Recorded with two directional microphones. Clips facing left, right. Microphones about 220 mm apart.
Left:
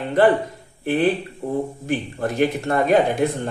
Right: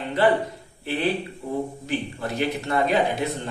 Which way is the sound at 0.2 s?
50° left (ahead or behind).